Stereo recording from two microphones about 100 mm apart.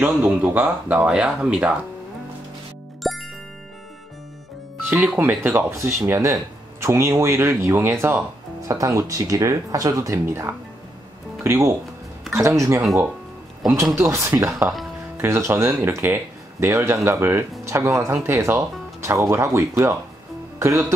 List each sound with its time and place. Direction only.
0.0 s speech: 15° right (ahead or behind)
3.0 s music: centre (ahead or behind)
4.8 s speech: 15° right (ahead or behind); by 12.8 s 30° right (ahead or behind)
13.9 s speech: 35° right (ahead or behind)